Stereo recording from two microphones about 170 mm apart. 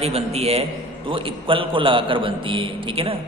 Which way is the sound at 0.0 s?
35° right (ahead or behind).